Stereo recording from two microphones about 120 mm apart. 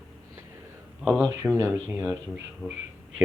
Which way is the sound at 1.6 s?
20° right (ahead or behind).